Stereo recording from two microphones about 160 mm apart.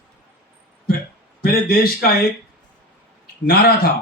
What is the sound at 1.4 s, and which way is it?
Speech, 70° left (ahead or behind).